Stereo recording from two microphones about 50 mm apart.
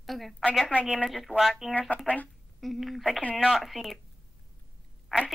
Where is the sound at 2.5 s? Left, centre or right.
Centre.